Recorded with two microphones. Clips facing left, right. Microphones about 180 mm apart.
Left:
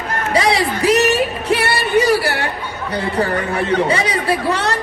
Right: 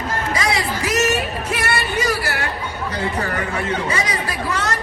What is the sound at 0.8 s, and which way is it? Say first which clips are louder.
Music: left 7 dB; 35° left (ahead or behind).